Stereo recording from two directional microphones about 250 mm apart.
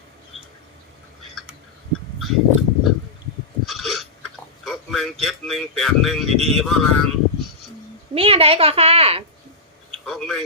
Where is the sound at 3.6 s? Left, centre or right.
Centre.